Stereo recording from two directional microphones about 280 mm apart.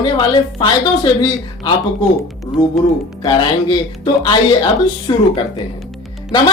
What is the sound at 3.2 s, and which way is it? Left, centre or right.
Speech, centre.